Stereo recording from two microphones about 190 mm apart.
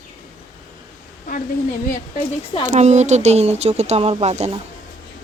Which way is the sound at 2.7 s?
35° right (ahead or behind).